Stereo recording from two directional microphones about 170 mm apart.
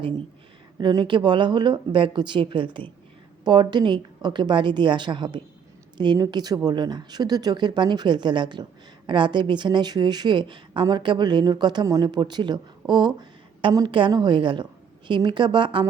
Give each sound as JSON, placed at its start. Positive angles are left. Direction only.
{"t": 0.8, "sound": "a woman's voice", "side_deg": -25}